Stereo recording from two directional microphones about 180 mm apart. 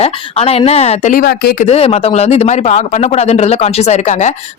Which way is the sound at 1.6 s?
35° left (ahead or behind).